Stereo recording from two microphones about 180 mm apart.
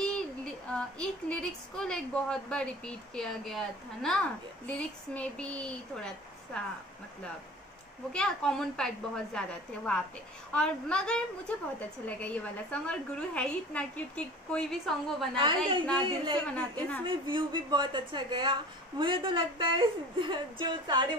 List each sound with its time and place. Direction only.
0.0 s speech: 5° left (ahead or behind)
8.1 s a woman's voice: 5° left (ahead or behind)
12.8 s a woman's voice: 5° left (ahead or behind)
15.3 s speech: 30° right (ahead or behind)
16.4 s speech: 5° left (ahead or behind)
17.0 s speech: 30° right (ahead or behind)